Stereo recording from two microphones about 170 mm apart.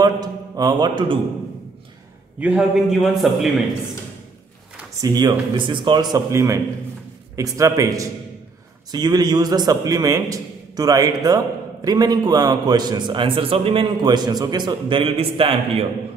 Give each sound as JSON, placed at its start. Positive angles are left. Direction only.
{"t": 0.0, "sound": "a man's voice", "side_deg": -20}
{"t": 2.4, "sound": "a man's voice", "side_deg": -5}
{"t": 5.0, "sound": "a man's voice", "side_deg": -25}